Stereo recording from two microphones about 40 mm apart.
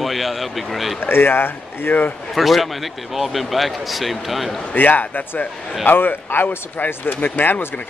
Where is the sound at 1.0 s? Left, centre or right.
Left.